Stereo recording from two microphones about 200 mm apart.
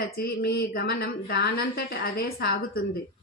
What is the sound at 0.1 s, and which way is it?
A woman's voice, 50° left (ahead or behind).